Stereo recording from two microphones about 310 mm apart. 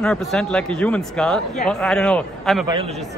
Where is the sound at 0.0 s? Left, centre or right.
Centre.